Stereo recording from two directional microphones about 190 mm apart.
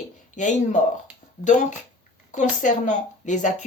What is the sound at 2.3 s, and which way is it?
Speech, 40° left (ahead or behind).